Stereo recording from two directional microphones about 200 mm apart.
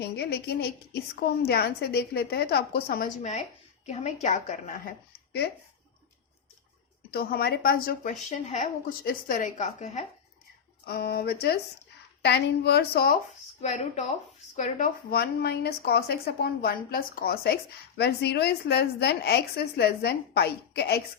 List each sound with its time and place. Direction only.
0.0 s speech: 55° left (ahead or behind)
7.1 s speech: 50° left (ahead or behind)
10.8 s a woman's voice: 50° left (ahead or behind)
13.6 s speech: 35° left (ahead or behind); by 21.0 s 55° left (ahead or behind)